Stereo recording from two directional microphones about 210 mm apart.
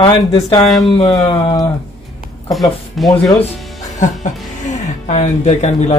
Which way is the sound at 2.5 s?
Centre (ahead or behind).